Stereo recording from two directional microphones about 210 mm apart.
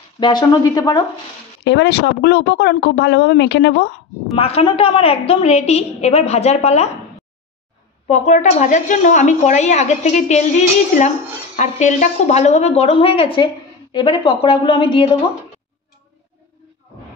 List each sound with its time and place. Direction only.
0.2 s a woman's voice: 20° left (ahead or behind)
1.6 s speech: 55° left (ahead or behind)
4.4 s a woman's voice: 30° left (ahead or behind)
8.1 s a woman's voice: 35° left (ahead or behind)